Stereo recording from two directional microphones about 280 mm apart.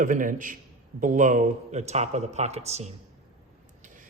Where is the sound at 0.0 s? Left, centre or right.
Right.